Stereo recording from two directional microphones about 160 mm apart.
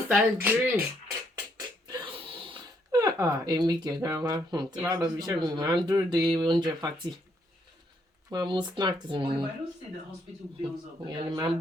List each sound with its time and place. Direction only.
0.1 s speech: 10° right (ahead or behind)
1.9 s gasp: 35° right (ahead or behind)
4.9 s speech: 25° right (ahead or behind)
8.3 s speech: 25° right (ahead or behind)
10.6 s speech: 30° right (ahead or behind)